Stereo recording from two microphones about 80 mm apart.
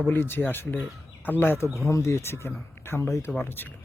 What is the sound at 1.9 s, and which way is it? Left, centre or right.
Speech, left.